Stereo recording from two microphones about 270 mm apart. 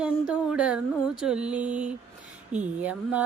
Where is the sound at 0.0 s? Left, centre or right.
Centre.